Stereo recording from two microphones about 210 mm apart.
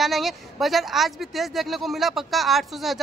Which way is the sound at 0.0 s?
Centre (ahead or behind).